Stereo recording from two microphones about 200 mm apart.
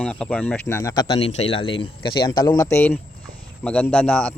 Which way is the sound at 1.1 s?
30° left (ahead or behind).